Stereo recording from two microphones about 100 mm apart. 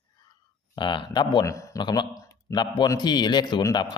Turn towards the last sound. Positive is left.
turn(degrees=45)  # may be behind; listen again after turning